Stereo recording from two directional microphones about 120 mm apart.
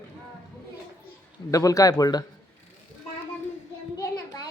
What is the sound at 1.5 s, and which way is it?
Speech, 30° left (ahead or behind).